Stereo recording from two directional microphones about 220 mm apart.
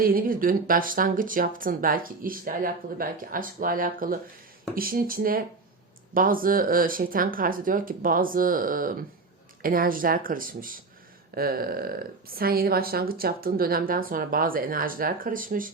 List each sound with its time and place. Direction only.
0.0 s speech: 40° right (ahead or behind)